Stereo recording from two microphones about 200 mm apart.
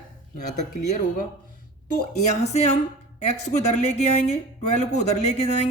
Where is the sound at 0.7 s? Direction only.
40° left (ahead or behind).